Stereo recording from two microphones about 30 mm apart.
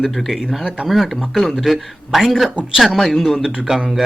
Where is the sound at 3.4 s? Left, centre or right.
Centre.